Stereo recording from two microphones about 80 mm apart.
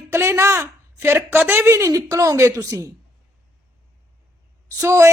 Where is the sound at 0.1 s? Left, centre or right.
Right.